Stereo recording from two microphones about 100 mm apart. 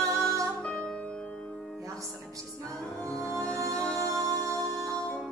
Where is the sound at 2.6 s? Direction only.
10° left (ahead or behind).